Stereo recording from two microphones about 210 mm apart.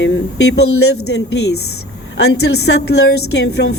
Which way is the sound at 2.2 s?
55° left (ahead or behind).